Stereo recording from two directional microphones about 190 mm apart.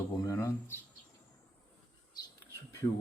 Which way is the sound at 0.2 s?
15° left (ahead or behind).